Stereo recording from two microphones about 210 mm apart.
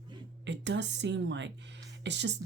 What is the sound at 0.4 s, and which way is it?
Speech, 60° right (ahead or behind).